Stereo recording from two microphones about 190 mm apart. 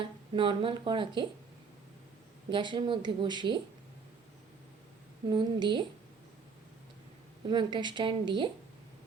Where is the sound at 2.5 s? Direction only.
25° right (ahead or behind).